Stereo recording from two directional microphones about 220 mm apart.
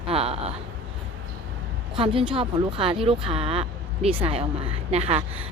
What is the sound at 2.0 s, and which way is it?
Speech, 25° right (ahead or behind).